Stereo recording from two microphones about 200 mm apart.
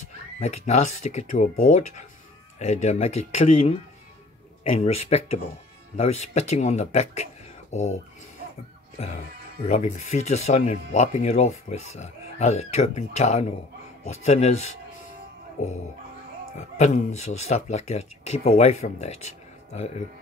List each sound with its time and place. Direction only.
0.4 s speech: 35° left (ahead or behind)